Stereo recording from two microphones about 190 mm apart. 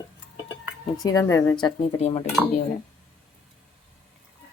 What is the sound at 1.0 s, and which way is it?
Speech, 15° left (ahead or behind).